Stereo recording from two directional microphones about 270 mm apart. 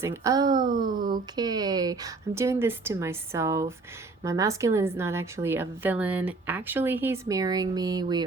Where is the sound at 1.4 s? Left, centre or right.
Centre.